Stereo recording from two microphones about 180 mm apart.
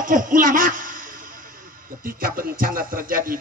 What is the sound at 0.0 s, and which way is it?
A man's voice, 50° right (ahead or behind).